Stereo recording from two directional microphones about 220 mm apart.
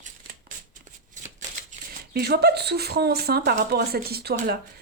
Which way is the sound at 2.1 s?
45° right (ahead or behind).